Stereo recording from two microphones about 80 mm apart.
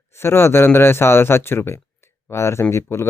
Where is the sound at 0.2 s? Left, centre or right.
Left.